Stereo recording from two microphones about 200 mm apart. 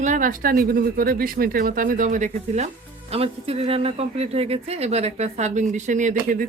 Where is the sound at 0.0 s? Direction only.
40° right (ahead or behind).